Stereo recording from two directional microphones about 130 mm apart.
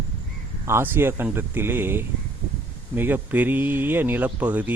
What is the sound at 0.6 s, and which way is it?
Speech, 20° right (ahead or behind).